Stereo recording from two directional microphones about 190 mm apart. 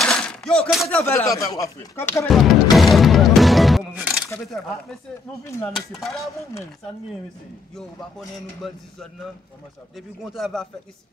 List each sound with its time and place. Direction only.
0.0 s a sound: 5° left (ahead or behind)
1.0 s speech: 15° left (ahead or behind)
2.2 s speech: centre (ahead or behind)
5.4 s speech: 15° left (ahead or behind)
5.8 s speech: centre (ahead or behind)
8.6 s speech: centre (ahead or behind)